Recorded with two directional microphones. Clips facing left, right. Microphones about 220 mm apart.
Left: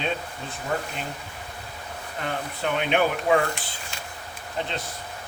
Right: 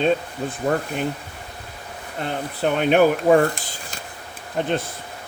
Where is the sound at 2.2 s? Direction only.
40° right (ahead or behind).